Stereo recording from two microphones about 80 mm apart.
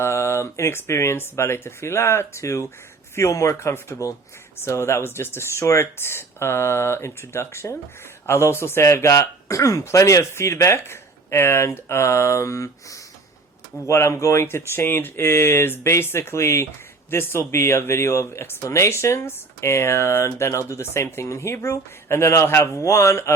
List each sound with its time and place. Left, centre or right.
0.0 s speech: left